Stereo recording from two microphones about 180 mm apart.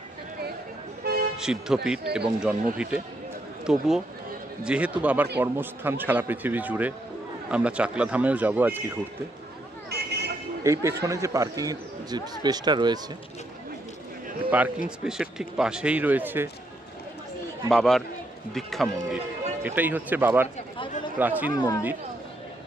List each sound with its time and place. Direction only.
1.0 s toot: 60° right (ahead or behind)
1.4 s speech: 5° right (ahead or behind)
9.9 s vehicle: 65° right (ahead or behind)
10.6 s speech: 15° right (ahead or behind)
14.5 s speech: 10° right (ahead or behind)
17.7 s speech: centre (ahead or behind)
19.6 s speech: 10° right (ahead or behind)
21.5 s speech: 20° left (ahead or behind)